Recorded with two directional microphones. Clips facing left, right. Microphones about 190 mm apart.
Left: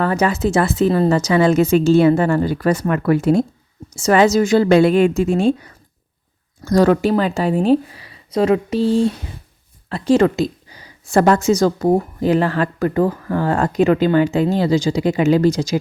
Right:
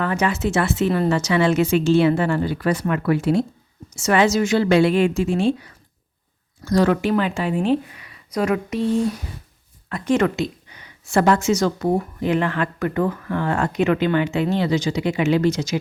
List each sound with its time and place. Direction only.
0.0 s a woman's voice: 35° left (ahead or behind)
3.8 s a woman's voice: 35° left (ahead or behind)